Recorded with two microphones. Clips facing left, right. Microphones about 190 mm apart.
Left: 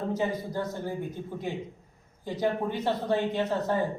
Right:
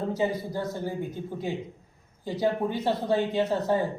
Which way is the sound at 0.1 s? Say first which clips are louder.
Right 2 dB; 10° right (ahead or behind).